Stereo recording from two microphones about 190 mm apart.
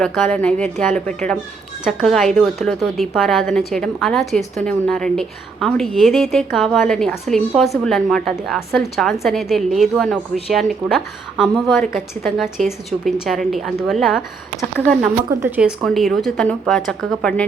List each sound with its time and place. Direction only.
0.0 s a woman's voice: 5° left (ahead or behind)
15.3 s a woman's voice: 10° right (ahead or behind)